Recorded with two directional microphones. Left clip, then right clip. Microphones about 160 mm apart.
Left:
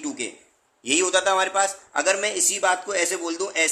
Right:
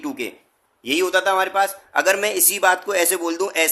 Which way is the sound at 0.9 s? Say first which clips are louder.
Right 2 dB; 20° right (ahead or behind).